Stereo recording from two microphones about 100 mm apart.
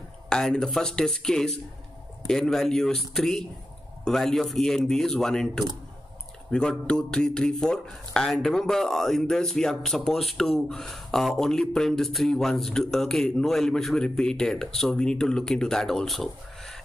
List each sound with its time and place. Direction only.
0.3 s speech: 5° left (ahead or behind)